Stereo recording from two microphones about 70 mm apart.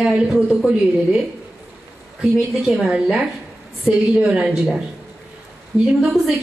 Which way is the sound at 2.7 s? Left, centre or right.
Centre.